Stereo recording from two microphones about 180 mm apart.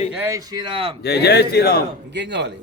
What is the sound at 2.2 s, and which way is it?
Speech, 75° right (ahead or behind).